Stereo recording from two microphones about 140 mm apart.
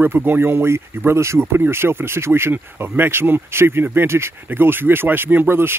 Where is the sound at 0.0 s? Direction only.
15° right (ahead or behind).